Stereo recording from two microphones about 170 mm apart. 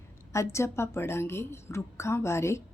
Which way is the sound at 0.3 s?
15° left (ahead or behind).